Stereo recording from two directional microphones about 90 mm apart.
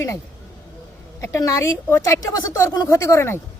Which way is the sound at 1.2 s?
35° left (ahead or behind).